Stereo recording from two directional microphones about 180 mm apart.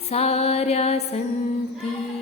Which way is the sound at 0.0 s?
35° left (ahead or behind).